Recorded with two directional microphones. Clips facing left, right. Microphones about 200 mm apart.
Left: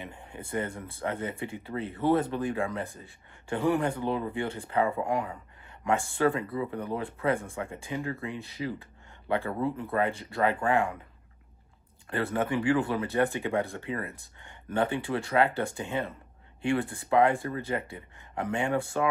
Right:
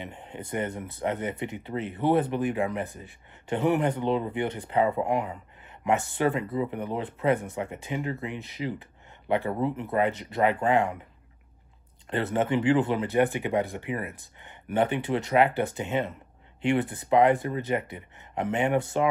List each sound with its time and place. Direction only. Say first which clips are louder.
0.0 s speech: right 3 dB; 25° right (ahead or behind)
12.1 s speech: right 3 dB; 20° right (ahead or behind)